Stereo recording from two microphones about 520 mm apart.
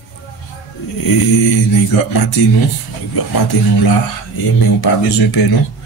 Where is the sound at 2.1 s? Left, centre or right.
Left.